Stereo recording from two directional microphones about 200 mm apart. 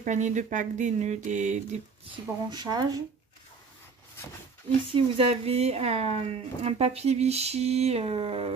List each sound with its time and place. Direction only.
0.0 s speech: 35° right (ahead or behind)
2.5 s speech: 20° right (ahead or behind)
4.9 s speech: 30° right (ahead or behind)